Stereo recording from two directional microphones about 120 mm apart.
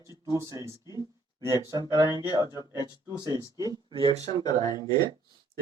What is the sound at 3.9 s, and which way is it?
Speech, 40° left (ahead or behind).